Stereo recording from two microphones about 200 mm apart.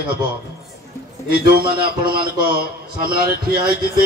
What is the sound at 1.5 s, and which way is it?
A man's voice, 50° right (ahead or behind).